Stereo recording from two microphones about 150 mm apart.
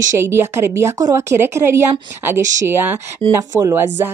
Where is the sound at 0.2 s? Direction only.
15° right (ahead or behind).